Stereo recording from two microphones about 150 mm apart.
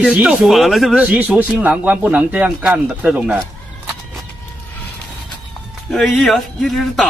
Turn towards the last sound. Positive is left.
turn(degrees=0)  # may be behind; listen again after turning